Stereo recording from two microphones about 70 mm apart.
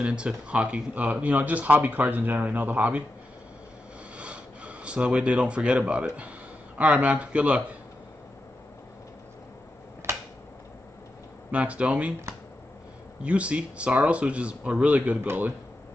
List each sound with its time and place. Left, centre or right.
0.0 s speech: centre
4.2 s speech: centre
11.5 s speech: centre
13.2 s speech: centre